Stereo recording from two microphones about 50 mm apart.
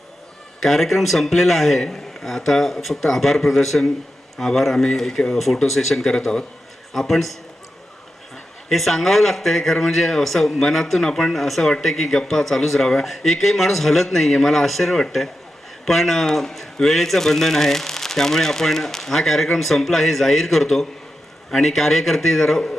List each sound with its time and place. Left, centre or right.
0.6 s a man's voice: centre
8.7 s a man's voice: centre